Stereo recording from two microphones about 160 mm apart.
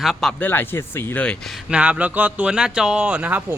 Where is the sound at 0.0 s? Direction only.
Centre (ahead or behind).